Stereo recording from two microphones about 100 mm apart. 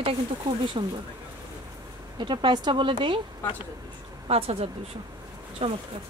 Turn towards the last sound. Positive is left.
turn(degrees=-70)  # may be behind; listen again after turning